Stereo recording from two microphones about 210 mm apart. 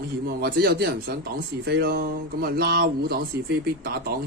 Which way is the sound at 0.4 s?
45° right (ahead or behind).